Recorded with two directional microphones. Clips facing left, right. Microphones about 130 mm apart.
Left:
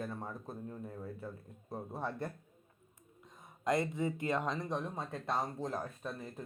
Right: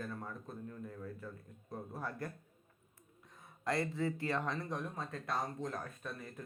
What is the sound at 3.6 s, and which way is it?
Speech, 20° left (ahead or behind).